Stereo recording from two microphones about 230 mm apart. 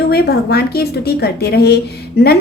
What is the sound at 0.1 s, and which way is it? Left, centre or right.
A woman's voice, left.